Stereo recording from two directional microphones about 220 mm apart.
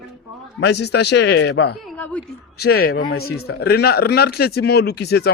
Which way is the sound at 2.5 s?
45° left (ahead or behind).